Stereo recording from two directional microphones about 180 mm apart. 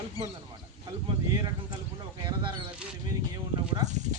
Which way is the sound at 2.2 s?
25° right (ahead or behind).